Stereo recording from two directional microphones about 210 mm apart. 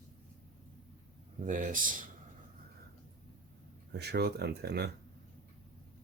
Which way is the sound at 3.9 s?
50° right (ahead or behind).